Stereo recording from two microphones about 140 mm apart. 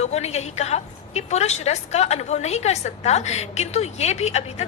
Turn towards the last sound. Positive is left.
turn(degrees=50)  # may be behind; listen again after turning